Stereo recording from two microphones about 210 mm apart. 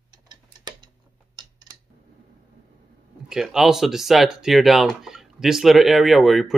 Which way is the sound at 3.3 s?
Centre (ahead or behind).